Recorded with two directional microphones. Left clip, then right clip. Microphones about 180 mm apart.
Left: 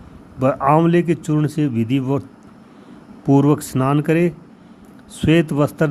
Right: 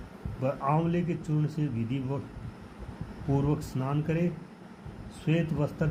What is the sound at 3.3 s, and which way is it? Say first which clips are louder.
Speech: left 15 dB; 60° left (ahead or behind).